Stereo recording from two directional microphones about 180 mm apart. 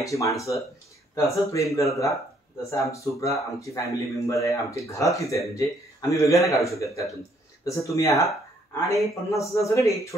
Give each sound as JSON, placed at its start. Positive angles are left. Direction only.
{"t": 0.0, "sound": "speech", "side_deg": 15}